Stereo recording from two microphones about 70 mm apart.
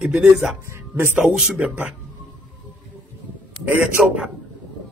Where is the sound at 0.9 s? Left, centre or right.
Right.